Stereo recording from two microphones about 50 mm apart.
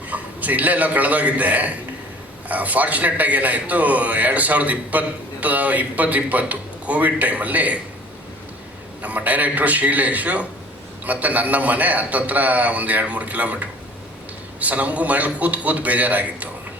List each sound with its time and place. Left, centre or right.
0.1 s a man's voice: right
9.0 s a man's voice: right